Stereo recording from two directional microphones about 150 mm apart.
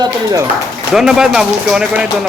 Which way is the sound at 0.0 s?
25° right (ahead or behind).